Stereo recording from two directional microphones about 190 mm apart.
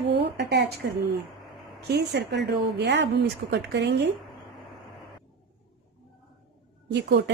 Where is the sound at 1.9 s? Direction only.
65° right (ahead or behind).